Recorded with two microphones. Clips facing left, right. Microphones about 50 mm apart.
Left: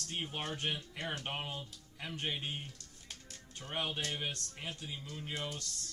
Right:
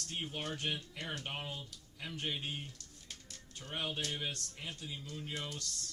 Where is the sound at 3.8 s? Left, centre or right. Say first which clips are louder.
Left 1 dB; left.